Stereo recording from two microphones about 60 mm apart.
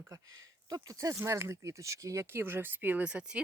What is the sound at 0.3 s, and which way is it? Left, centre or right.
Speech, right.